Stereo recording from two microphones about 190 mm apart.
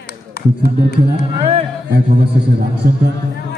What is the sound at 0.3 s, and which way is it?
Speech, 60° left (ahead or behind).